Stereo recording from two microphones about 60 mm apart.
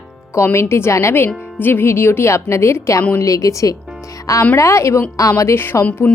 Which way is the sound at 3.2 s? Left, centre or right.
Left.